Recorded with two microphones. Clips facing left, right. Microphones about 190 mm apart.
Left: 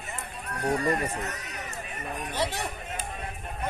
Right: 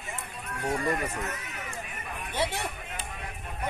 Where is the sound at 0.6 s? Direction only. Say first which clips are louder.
Left 3 dB; 35° left (ahead or behind).